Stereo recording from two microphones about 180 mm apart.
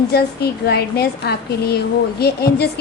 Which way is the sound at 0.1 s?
60° left (ahead or behind).